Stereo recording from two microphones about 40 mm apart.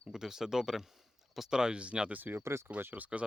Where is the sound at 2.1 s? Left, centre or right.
Right.